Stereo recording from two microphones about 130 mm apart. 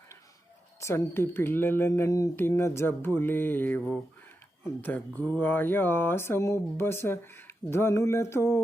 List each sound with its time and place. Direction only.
0.8 s speech: 20° left (ahead or behind)